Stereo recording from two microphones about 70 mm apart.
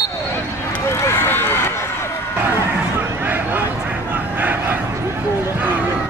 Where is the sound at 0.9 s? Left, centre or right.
Left.